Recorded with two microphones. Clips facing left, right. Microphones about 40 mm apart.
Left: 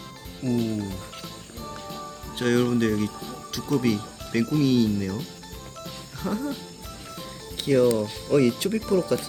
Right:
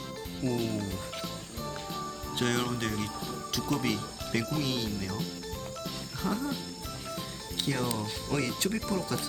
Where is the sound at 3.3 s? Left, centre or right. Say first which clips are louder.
Left 3 dB; centre.